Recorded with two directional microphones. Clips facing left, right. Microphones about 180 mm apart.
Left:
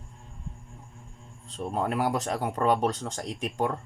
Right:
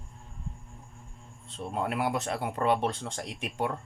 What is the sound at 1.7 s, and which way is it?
Speech, 40° left (ahead or behind).